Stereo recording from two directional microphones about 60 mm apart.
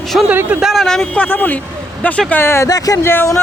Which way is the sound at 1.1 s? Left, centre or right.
Left.